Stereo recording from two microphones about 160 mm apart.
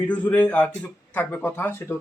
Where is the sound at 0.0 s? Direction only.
10° left (ahead or behind).